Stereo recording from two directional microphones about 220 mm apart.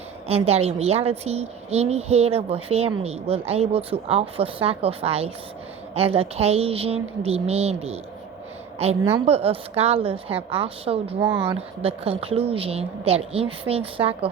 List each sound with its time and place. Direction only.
0.3 s a woman's voice: 25° right (ahead or behind)